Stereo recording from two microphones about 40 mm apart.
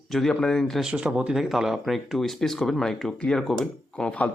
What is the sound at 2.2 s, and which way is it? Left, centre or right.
A man's voice, centre.